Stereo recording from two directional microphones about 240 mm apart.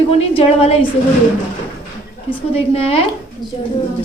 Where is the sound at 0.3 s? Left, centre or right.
Left.